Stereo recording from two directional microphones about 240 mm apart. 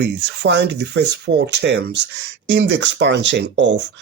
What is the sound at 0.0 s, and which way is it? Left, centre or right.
Speech, right.